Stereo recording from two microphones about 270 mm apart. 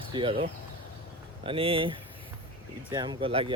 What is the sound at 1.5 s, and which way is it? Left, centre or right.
Speech, centre.